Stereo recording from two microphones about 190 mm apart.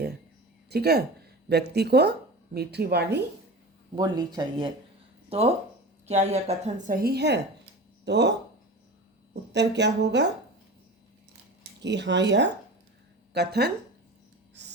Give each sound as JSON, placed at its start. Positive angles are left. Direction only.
{"t": 0.7, "sound": "a woman's voice", "side_deg": -55}
{"t": 3.9, "sound": "a woman's voice", "side_deg": -20}
{"t": 11.8, "sound": "a woman's voice", "side_deg": -65}